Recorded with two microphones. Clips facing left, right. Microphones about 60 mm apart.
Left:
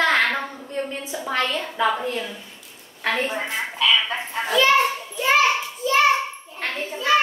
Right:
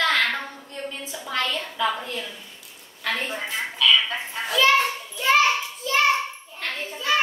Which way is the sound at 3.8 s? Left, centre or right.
Left.